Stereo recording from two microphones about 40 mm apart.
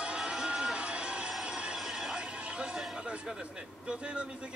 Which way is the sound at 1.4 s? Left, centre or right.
Right.